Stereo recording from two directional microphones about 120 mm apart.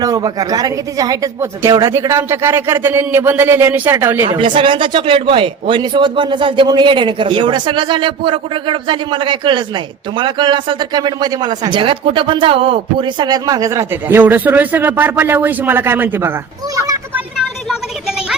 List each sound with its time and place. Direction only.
0.0 s speech: 30° right (ahead or behind)
4.3 s speech: 45° right (ahead or behind); by 16.4 s 20° right (ahead or behind)
17.2 s a sound: 5° right (ahead or behind)